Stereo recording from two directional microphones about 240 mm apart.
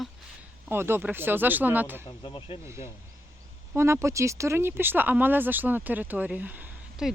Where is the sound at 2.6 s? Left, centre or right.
Centre.